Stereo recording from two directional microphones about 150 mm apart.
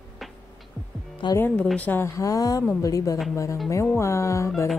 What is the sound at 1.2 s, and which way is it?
Speech, 30° left (ahead or behind).